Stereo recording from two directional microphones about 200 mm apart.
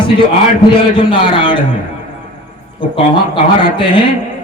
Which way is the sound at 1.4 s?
25° left (ahead or behind).